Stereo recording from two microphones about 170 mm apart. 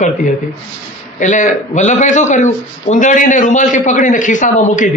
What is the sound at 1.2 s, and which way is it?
A man's voice, 45° left (ahead or behind).